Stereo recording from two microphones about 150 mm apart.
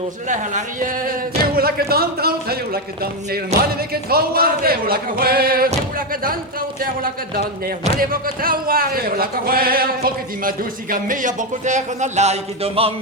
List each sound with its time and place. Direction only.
0.3 s speech: 60° right (ahead or behind)
1.5 s a man's voice: 90° right
6.2 s speech: 75° right (ahead or behind); by 12.9 s 40° right (ahead or behind)